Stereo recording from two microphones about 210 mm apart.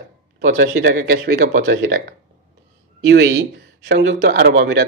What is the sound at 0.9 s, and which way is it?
Speech, 55° right (ahead or behind).